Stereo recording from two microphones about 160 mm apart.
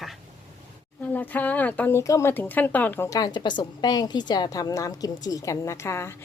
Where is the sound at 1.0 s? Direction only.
10° left (ahead or behind).